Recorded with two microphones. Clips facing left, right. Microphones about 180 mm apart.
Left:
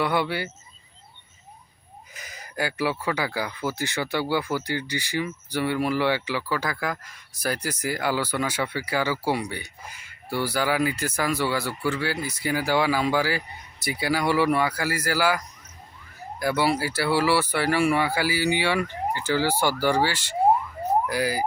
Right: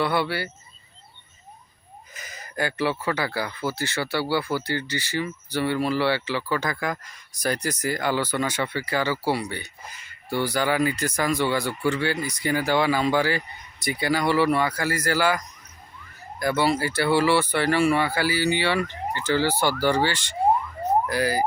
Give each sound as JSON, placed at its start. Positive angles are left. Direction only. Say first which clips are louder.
{"t": 0.0, "sound": "speech", "louder": "even", "side_deg": 15}
{"t": 2.1, "sound": "a sound", "louder": "right 1 dB", "side_deg": 10}
{"t": 3.1, "sound": "speech", "louder": "right 1 dB", "side_deg": 10}